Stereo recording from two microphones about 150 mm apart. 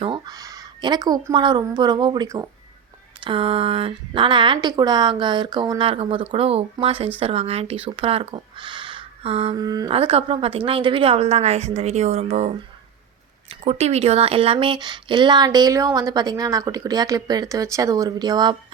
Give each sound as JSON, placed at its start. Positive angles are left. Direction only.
{"t": 0.0, "sound": "a sound", "side_deg": -35}
{"t": 0.3, "sound": "speech", "side_deg": -25}
{"t": 3.2, "sound": "speech", "side_deg": -35}
{"t": 9.6, "sound": "speech", "side_deg": -25}
{"t": 9.9, "sound": "speech", "side_deg": -35}